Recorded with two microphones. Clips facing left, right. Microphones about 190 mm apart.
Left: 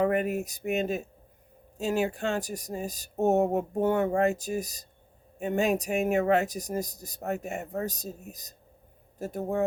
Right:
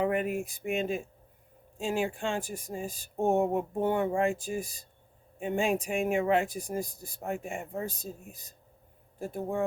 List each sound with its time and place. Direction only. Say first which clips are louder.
0.0 s speech: left 3 dB; 45° left (ahead or behind)